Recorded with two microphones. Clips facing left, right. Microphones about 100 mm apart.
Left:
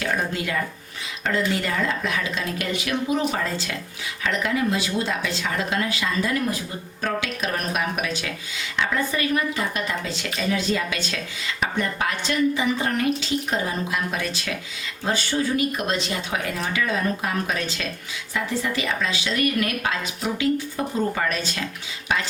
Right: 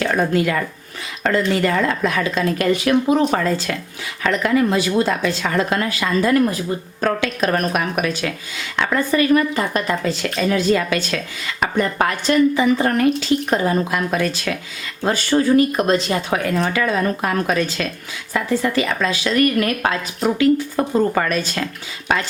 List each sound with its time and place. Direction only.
0.0 s a woman's voice: 65° right (ahead or behind)
1.6 s a woman's voice: 60° right (ahead or behind)